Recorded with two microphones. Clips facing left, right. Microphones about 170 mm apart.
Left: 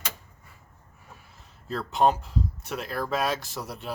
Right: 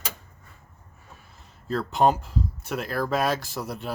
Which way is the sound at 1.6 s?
Centre (ahead or behind).